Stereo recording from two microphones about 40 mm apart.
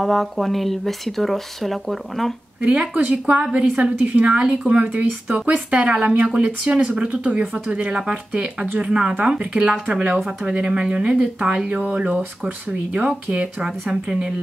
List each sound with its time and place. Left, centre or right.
0.0 s speech: centre
2.6 s a woman's voice: right
13.6 s a woman's voice: centre